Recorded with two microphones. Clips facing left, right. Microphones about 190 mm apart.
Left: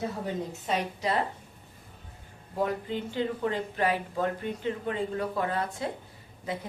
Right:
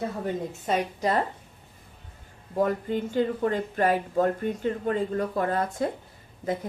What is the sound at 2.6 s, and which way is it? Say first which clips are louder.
Speech: right 4 dB; 45° right (ahead or behind).